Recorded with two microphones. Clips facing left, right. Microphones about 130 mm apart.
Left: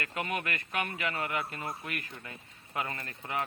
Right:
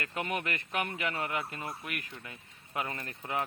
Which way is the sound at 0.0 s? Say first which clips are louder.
Even; 25° right (ahead or behind).